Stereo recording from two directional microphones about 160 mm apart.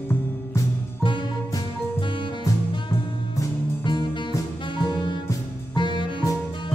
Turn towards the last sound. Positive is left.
turn(degrees=30)  # may be behind; listen again after turning